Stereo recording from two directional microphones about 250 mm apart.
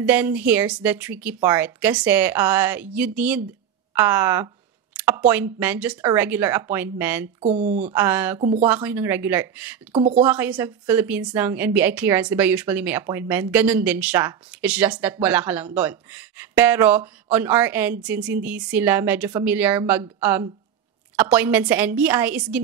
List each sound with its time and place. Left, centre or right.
0.0 s a woman's voice: centre
4.9 s a sound: centre
5.3 s a woman's voice: centre
7.3 s speech: right
7.8 s a woman's voice: centre
8.4 s speech: right
8.6 s a woman's voice: centre
9.9 s speech: right
10.2 s a woman's voice: centre